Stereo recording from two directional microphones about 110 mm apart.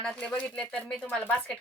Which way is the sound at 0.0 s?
10° left (ahead or behind).